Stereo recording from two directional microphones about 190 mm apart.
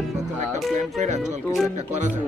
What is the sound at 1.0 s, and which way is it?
Speech, 35° right (ahead or behind).